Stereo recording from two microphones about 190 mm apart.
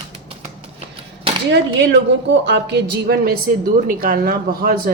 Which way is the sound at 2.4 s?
65° right (ahead or behind).